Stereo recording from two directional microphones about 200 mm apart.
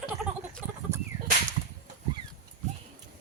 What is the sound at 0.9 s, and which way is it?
Whip, 15° right (ahead or behind).